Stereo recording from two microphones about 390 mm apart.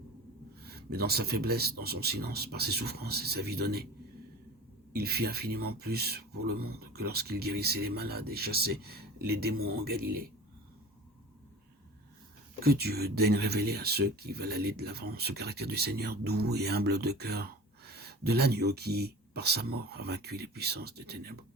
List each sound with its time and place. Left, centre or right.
0.6 s speech: right
4.9 s speech: right
12.6 s speech: right